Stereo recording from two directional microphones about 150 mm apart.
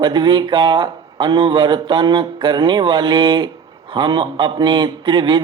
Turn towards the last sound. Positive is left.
turn(degrees=-30)  # may be behind; listen again after turning